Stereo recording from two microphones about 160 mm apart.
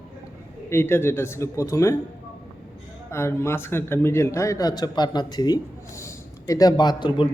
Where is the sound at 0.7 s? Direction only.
15° left (ahead or behind).